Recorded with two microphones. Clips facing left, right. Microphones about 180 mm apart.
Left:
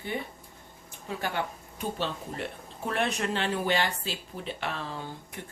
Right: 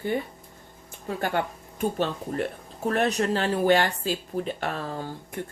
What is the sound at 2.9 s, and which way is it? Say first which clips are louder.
Speech: right 5 dB; 40° right (ahead or behind).